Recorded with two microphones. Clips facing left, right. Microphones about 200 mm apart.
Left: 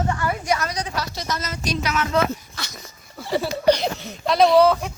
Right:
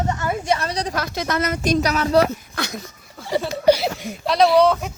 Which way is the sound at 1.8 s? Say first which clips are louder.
Right 2 dB; 35° right (ahead or behind).